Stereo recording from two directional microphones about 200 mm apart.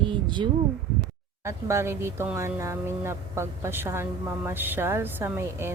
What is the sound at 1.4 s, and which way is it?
Speech, 15° right (ahead or behind).